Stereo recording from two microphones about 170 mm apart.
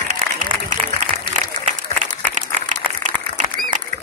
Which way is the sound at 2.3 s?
45° right (ahead or behind).